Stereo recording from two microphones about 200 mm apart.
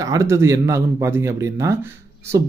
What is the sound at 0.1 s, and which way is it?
Speech, 15° right (ahead or behind).